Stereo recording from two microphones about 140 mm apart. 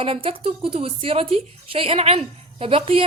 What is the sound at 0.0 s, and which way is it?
A woman's voice, 40° right (ahead or behind).